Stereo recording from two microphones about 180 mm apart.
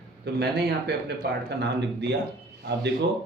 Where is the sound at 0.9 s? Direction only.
65° right (ahead or behind).